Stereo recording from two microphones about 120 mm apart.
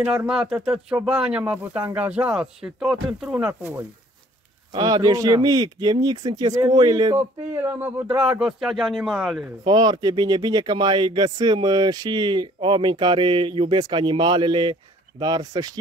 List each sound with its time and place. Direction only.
0.3 s speech: 5° right (ahead or behind)
4.7 s speech: 30° right (ahead or behind)
7.2 s speech: 20° right (ahead or behind)
8.2 s speech: 5° right (ahead or behind)
9.7 s speech: 35° right (ahead or behind)